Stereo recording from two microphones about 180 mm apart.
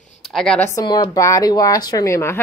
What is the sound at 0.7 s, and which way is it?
Speech, 20° left (ahead or behind).